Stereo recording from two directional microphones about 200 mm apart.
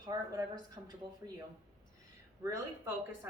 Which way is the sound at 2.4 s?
15° right (ahead or behind).